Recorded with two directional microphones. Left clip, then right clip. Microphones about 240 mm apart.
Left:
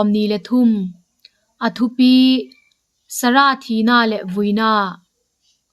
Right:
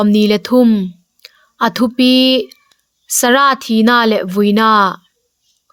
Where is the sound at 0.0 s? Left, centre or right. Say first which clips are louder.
Right 5 dB; right.